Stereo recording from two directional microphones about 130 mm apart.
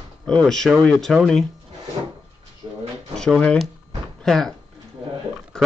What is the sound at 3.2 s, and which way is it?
Speech, 5° left (ahead or behind).